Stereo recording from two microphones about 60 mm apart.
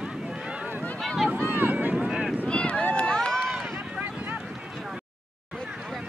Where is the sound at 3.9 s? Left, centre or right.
Right.